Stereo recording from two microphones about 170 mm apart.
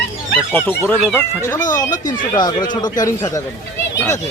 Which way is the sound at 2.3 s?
25° left (ahead or behind).